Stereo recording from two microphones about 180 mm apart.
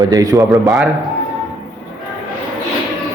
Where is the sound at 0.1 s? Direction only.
20° right (ahead or behind).